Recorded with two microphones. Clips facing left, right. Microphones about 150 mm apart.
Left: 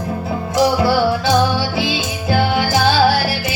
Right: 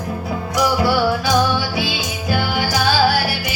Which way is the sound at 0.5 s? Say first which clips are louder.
Left 3 dB; 30° left (ahead or behind).